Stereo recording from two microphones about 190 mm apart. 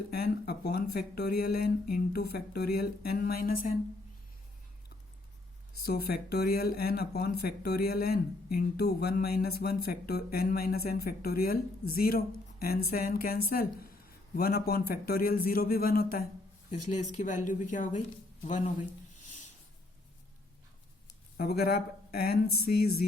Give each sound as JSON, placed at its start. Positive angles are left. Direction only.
{"t": 0.1, "sound": "speech", "side_deg": 55}
{"t": 5.8, "sound": "speech", "side_deg": 55}
{"t": 21.3, "sound": "speech", "side_deg": 55}